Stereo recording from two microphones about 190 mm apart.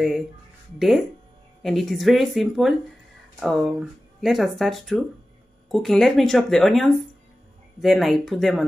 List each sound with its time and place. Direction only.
0.7 s speech: centre (ahead or behind)